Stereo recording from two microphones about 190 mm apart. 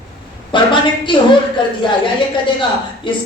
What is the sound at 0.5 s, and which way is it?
Speech, 25° left (ahead or behind).